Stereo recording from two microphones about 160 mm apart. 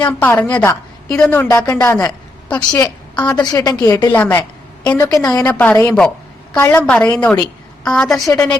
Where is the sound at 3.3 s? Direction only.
25° left (ahead or behind).